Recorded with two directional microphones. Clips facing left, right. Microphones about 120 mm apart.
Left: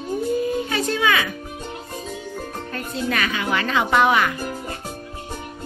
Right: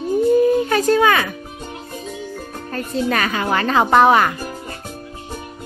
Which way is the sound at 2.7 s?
40° right (ahead or behind).